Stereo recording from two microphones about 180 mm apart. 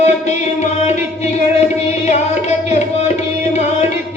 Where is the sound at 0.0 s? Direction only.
40° left (ahead or behind).